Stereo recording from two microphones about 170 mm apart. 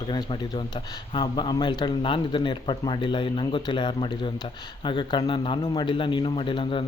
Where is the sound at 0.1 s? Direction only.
25° left (ahead or behind).